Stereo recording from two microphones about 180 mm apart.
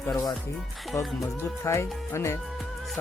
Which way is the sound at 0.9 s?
15° left (ahead or behind).